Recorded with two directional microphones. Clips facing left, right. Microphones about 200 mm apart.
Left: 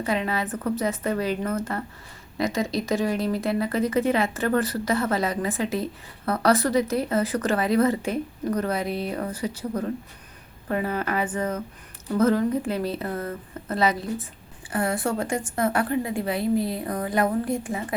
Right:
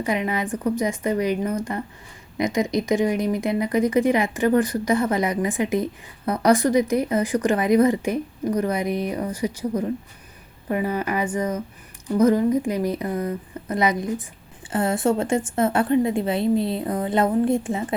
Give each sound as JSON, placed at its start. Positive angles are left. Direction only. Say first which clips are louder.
{"t": 0.0, "sound": "a woman's voice", "louder": "right 2 dB", "side_deg": -15}